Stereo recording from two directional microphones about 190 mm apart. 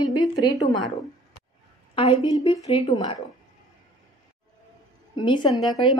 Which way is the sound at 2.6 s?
20° left (ahead or behind).